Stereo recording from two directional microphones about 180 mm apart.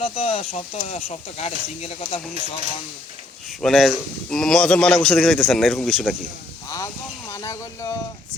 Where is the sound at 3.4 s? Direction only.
Centre (ahead or behind).